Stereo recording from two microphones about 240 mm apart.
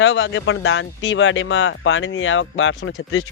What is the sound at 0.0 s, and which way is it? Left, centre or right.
Speech, left.